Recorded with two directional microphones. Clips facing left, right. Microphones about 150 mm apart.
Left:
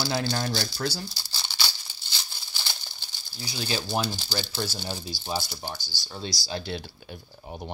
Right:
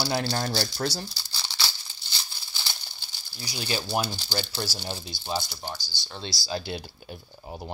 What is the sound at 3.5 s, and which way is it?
Speech, 10° right (ahead or behind).